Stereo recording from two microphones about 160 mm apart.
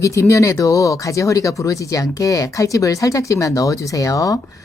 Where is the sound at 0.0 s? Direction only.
20° left (ahead or behind).